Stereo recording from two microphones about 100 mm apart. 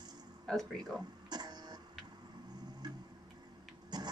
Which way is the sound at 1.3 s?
45° right (ahead or behind).